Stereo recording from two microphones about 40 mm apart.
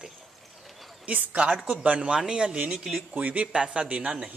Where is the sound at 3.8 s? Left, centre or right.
Right.